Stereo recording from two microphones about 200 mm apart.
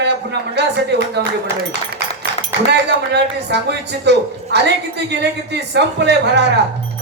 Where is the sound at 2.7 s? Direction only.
55° right (ahead or behind).